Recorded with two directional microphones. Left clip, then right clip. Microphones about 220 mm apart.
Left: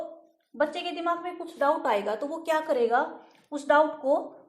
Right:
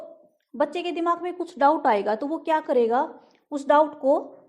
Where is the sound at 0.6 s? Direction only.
50° right (ahead or behind).